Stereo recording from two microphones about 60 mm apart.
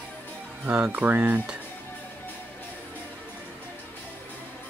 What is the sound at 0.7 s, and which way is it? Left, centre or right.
Speech, right.